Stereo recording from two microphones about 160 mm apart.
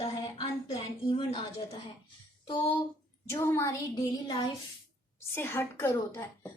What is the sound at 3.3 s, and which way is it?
Speech, 15° left (ahead or behind).